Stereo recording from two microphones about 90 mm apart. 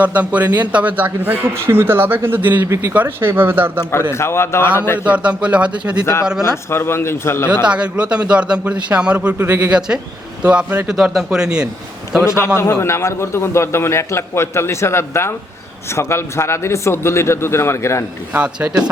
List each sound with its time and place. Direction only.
0.0 s a man's voice: 15° right (ahead or behind)
4.1 s a man's voice: 30° left (ahead or behind)
5.0 s a man's voice: 15° right (ahead or behind)
6.5 s a man's voice: 25° left (ahead or behind)
7.4 s a man's voice: 10° right (ahead or behind)
10.9 s a man's voice: 5° right (ahead or behind)
12.2 s a man's voice: 30° left (ahead or behind)
18.3 s a man's voice: 15° right (ahead or behind)